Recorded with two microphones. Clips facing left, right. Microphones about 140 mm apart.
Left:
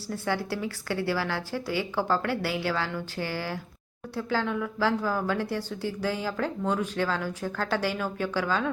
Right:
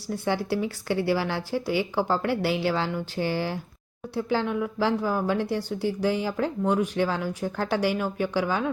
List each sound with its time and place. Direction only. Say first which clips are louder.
0.3 s speech: right 4 dB; 20° right (ahead or behind)